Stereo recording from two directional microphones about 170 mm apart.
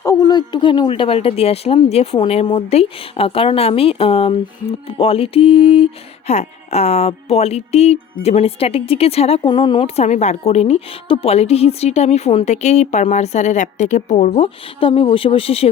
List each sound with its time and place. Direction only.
0.0 s speech: 20° left (ahead or behind)